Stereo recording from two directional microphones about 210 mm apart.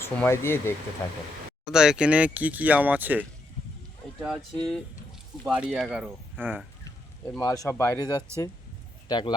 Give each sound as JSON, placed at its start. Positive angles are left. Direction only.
{"t": 0.0, "sound": "speech", "side_deg": 10}
{"t": 1.7, "sound": "speech", "side_deg": -5}
{"t": 6.8, "sound": "speech", "side_deg": 10}